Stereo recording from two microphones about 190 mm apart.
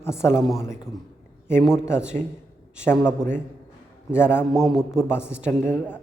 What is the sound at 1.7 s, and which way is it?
Speech, 15° left (ahead or behind).